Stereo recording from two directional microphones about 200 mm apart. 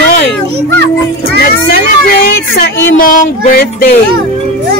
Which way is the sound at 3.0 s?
45° left (ahead or behind).